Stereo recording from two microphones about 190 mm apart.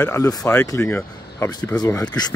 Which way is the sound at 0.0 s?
15° left (ahead or behind).